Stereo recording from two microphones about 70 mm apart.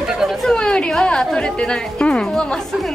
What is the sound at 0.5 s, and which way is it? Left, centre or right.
A woman's voice, centre.